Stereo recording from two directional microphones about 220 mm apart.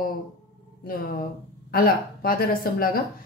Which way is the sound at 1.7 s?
40° left (ahead or behind).